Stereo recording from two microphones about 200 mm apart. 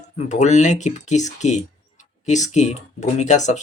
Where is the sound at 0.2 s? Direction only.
35° left (ahead or behind).